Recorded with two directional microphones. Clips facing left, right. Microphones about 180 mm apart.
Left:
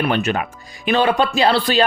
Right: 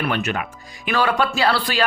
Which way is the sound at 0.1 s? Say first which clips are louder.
Left 4 dB; 25° left (ahead or behind).